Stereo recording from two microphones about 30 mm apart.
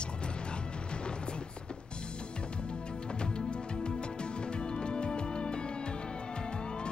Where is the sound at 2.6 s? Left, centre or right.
Left.